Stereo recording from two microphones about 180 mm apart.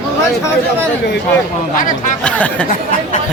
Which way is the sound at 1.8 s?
45° left (ahead or behind).